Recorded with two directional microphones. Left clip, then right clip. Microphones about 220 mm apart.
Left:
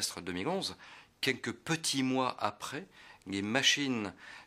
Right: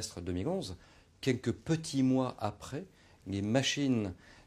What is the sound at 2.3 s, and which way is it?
Speech, 55° right (ahead or behind).